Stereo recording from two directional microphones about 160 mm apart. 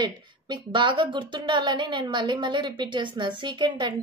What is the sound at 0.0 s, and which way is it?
A woman's voice, 30° right (ahead or behind).